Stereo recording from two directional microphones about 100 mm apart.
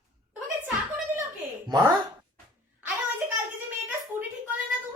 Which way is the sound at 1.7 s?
45° right (ahead or behind).